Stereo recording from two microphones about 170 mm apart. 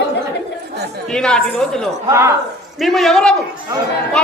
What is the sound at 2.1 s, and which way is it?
Speech, 15° right (ahead or behind).